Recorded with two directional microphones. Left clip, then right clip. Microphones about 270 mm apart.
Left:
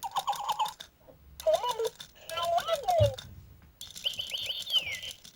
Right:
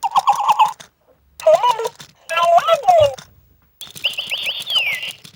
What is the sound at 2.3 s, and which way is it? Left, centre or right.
Clip-clop, right.